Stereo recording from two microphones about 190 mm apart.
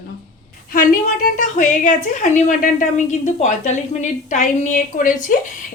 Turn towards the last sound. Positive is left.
turn(degrees=45)  # may be behind; listen again after turning